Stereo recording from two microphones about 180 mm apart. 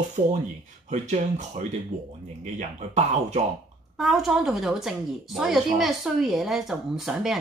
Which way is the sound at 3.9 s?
Centre (ahead or behind).